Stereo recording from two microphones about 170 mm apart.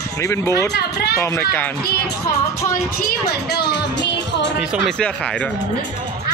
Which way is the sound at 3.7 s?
90° left.